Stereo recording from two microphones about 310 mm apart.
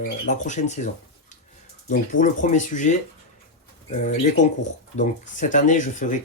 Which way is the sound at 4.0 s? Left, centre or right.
Left.